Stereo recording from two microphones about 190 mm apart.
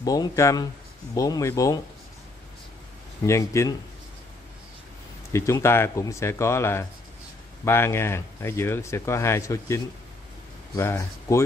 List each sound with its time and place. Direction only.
0.0 s speech: 20° left (ahead or behind)
3.3 s speech: 15° left (ahead or behind)
5.3 s speech: 15° left (ahead or behind)